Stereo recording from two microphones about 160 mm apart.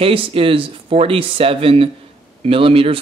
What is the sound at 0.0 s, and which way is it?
Speech, 35° right (ahead or behind).